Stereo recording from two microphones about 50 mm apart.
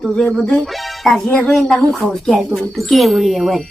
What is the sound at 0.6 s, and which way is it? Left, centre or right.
Speech, centre.